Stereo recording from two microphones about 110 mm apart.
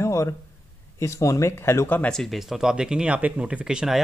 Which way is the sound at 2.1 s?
5° left (ahead or behind).